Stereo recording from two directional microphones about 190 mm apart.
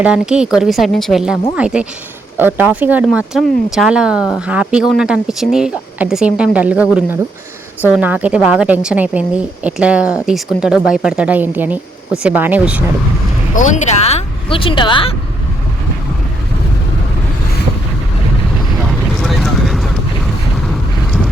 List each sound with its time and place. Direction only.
0.0 s a woman's voice: 5° right (ahead or behind)
13.6 s speech: 40° left (ahead or behind)
18.9 s vehicle: centre (ahead or behind)